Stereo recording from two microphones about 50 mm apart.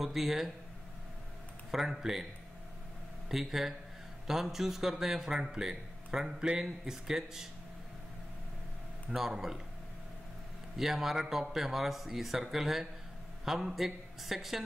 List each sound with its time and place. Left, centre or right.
0.0 s speech: centre
1.7 s speech: centre
3.3 s speech: centre
9.1 s speech: centre
10.8 s speech: centre